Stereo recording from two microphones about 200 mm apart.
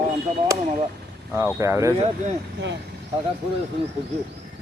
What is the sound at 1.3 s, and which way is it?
Speech, 10° right (ahead or behind).